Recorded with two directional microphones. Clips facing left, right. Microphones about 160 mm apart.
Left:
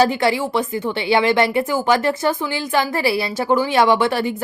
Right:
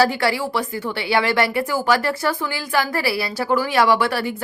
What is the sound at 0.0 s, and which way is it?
Speech, 20° left (ahead or behind).